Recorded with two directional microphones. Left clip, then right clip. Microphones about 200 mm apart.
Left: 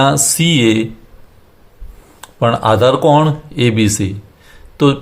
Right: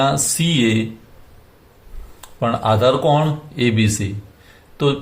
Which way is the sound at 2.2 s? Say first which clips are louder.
Left 5 dB; 40° left (ahead or behind).